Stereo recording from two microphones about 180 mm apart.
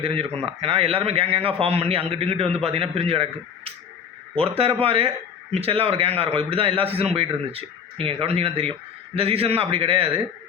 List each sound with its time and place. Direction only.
0.0 s a man's voice: 30° right (ahead or behind)